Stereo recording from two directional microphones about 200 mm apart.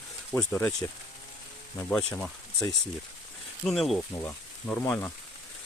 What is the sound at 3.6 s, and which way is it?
Speech, centre (ahead or behind).